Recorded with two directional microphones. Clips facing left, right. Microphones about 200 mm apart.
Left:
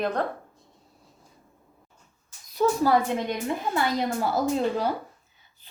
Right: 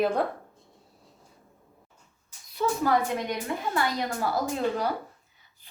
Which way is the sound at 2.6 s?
40° left (ahead or behind).